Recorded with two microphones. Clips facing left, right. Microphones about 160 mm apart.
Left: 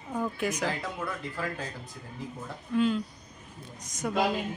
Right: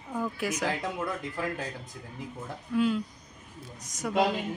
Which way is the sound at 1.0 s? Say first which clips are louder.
Right 2 dB; 15° right (ahead or behind).